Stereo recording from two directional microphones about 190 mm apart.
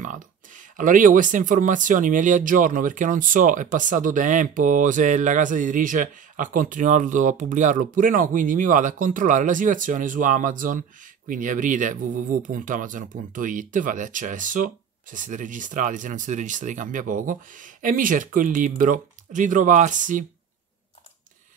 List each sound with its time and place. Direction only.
0.0 s speech: 40° right (ahead or behind)